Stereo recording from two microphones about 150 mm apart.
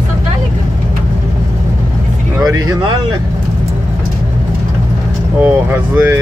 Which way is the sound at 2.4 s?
25° right (ahead or behind).